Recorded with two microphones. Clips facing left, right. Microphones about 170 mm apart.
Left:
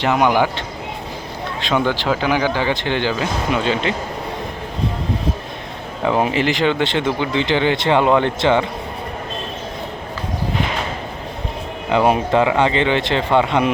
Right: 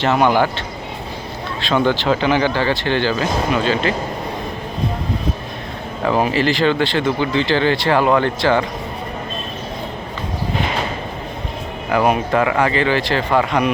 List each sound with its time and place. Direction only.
0.0 s speech: 15° left (ahead or behind)
1.9 s speech: 10° left (ahead or behind)
6.1 s speech: 20° left (ahead or behind)
11.9 s speech: 25° left (ahead or behind)